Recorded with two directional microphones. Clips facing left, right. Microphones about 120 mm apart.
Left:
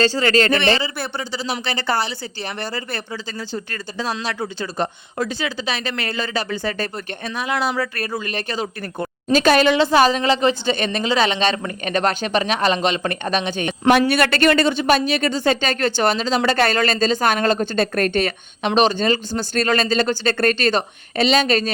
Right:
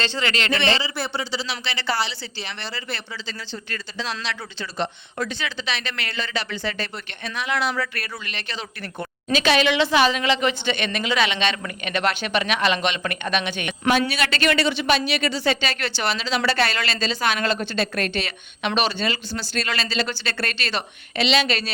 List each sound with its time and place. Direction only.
0.0 s speech: 40° left (ahead or behind)
14.1 s speech: 50° left (ahead or behind)